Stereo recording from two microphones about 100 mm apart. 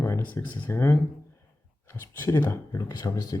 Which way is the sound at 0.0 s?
20° left (ahead or behind).